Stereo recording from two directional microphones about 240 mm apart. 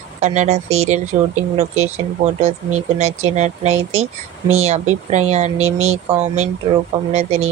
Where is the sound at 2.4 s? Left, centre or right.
Right.